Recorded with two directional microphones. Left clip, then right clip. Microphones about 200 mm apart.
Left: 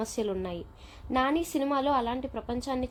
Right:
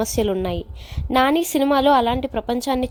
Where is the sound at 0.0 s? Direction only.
40° right (ahead or behind).